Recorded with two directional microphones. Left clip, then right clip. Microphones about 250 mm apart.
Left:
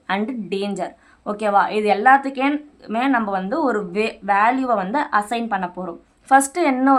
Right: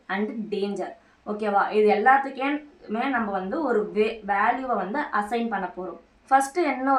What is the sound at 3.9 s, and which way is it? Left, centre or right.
A woman's voice, left.